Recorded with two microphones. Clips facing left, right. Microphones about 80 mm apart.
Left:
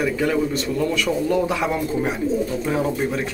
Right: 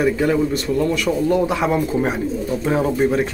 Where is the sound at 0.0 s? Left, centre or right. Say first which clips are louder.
Right 3 dB; centre.